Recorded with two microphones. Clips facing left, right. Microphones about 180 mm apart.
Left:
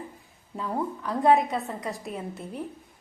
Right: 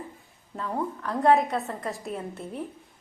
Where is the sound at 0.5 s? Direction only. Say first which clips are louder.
Left 1 dB; centre (ahead or behind).